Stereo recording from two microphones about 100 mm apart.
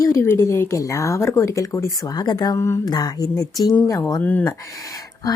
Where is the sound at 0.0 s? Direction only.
30° left (ahead or behind).